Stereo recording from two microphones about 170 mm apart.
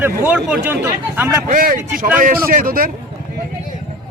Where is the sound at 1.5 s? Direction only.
55° right (ahead or behind).